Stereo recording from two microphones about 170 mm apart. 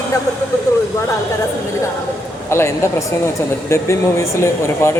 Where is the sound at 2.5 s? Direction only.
15° left (ahead or behind).